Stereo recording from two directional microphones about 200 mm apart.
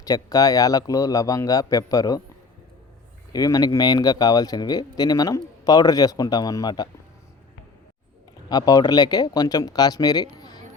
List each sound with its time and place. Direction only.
0.0 s speech: 20° left (ahead or behind)
3.3 s speech: 20° left (ahead or behind)
8.4 s speech: 20° left (ahead or behind)